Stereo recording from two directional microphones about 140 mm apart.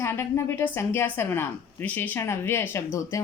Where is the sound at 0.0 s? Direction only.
20° left (ahead or behind).